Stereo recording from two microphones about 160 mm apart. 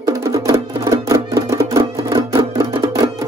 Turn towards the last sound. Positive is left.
turn(degrees=-20)  # may be behind; listen again after turning